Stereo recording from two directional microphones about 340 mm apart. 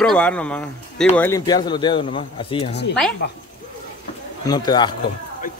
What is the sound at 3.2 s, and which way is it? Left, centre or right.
Speech, left.